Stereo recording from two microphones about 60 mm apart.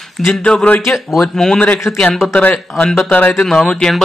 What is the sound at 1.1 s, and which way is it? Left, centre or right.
Speech, centre.